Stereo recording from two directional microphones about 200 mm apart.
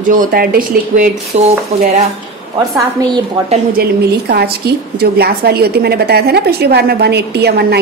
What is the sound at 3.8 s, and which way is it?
A woman's voice, 55° right (ahead or behind).